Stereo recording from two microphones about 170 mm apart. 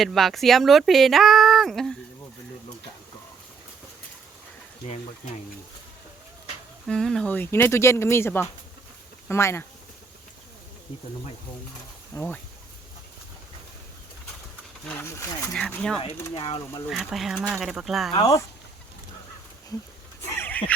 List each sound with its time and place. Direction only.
0.0 s speech: centre (ahead or behind)
6.8 s speech: 5° left (ahead or behind)
12.1 s speech: 10° left (ahead or behind)
14.8 s speech: 15° left (ahead or behind)
15.5 s speech: 5° left (ahead or behind)
16.3 s speech: 30° left (ahead or behind)
16.9 s speech: centre (ahead or behind)
18.1 s speech: 20° left (ahead or behind)
20.2 s horse: 15° left (ahead or behind)